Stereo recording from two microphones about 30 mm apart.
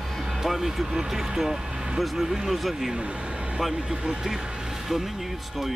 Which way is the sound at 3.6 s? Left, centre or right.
Centre.